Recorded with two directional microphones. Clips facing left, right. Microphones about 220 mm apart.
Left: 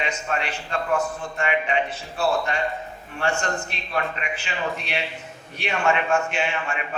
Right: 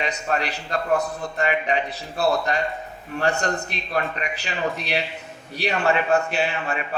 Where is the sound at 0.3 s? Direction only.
40° right (ahead or behind).